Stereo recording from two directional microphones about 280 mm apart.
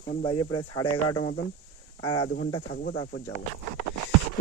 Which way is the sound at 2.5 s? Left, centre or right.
Centre.